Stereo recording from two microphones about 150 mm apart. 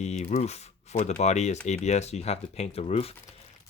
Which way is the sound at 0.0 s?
45° left (ahead or behind).